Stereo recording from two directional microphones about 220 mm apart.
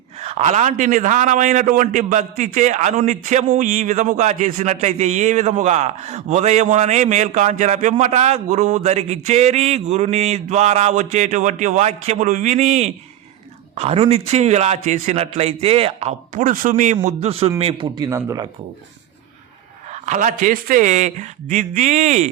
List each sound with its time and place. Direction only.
0.2 s a man's voice: 30° right (ahead or behind)
19.9 s a man's voice: 35° right (ahead or behind)